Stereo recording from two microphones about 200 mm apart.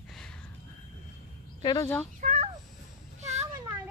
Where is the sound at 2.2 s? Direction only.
35° right (ahead or behind).